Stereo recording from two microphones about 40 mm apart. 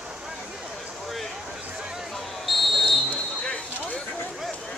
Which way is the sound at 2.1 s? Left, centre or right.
Centre.